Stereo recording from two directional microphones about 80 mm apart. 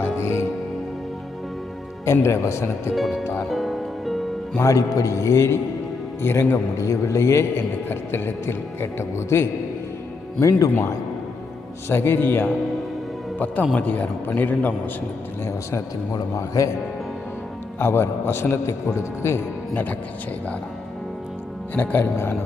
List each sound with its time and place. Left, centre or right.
0.0 s music: left
2.2 s a man's voice: left
2.9 s speech: centre
3.5 s music: centre
4.6 s a man's voice: left
13.7 s a man's voice: centre
16.3 s a man's voice: left
17.7 s a man's voice: left
21.8 s a man's voice: left